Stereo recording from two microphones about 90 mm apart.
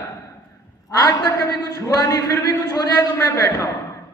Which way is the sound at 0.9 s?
45° left (ahead or behind).